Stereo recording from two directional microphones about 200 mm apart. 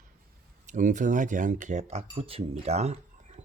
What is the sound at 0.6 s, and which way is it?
Speech, 40° right (ahead or behind).